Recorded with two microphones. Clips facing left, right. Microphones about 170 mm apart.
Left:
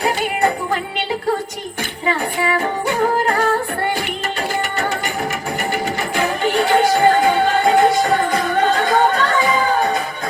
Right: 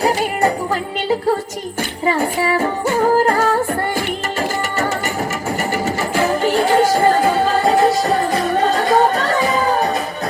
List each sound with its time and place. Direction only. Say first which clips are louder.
0.0 s music: right 2 dB; 40° right (ahead or behind)
2.0 s yodeling: right 2 dB; 40° right (ahead or behind)
5.7 s music: right 2 dB; 40° right (ahead or behind)